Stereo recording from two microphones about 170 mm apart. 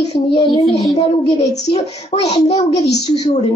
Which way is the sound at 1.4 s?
20° left (ahead or behind).